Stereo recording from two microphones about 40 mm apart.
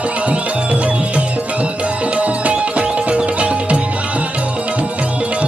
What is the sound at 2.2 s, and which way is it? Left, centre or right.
Music, right.